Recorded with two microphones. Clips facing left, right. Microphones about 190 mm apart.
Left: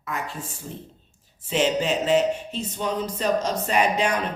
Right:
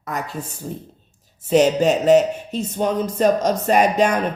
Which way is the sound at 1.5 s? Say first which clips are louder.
Right 7 dB; 40° right (ahead or behind).